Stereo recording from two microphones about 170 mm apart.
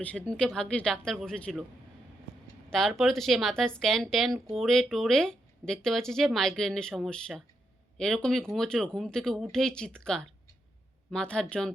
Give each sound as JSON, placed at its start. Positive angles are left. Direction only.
{"t": 0.0, "sound": "speech", "side_deg": 10}
{"t": 2.6, "sound": "speech", "side_deg": 0}